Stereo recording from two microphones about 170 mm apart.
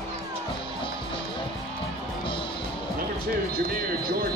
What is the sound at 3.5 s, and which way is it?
Speech, 60° right (ahead or behind).